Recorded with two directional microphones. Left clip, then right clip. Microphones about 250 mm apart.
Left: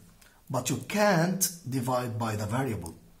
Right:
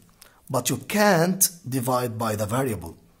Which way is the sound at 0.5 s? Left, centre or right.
Right.